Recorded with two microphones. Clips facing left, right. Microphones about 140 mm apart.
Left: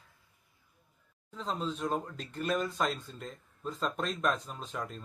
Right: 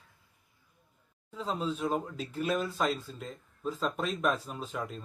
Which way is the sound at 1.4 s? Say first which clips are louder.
Right 2 dB; 5° right (ahead or behind).